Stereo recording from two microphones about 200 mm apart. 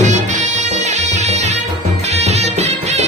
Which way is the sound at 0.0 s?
35° right (ahead or behind).